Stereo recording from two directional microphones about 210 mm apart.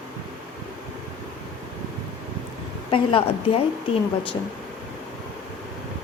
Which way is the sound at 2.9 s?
25° left (ahead or behind).